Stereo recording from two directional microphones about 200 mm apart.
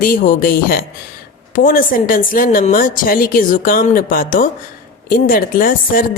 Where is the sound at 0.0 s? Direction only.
45° left (ahead or behind).